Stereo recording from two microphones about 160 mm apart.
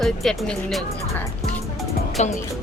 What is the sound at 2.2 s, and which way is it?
Speech, 45° left (ahead or behind).